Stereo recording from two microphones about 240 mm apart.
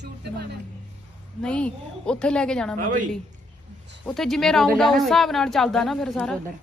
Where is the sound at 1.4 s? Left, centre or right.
Centre.